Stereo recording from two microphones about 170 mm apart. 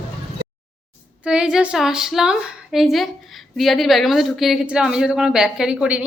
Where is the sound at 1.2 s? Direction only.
5° right (ahead or behind).